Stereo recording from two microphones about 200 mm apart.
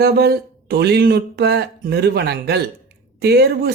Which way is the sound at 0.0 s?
55° right (ahead or behind).